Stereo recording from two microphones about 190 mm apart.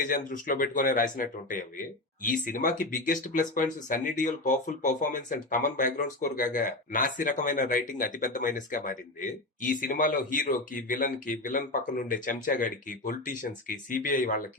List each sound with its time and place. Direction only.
0.0 s speech: 45° left (ahead or behind)